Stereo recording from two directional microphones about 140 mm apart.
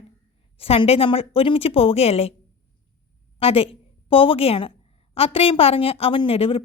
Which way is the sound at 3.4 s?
45° left (ahead or behind).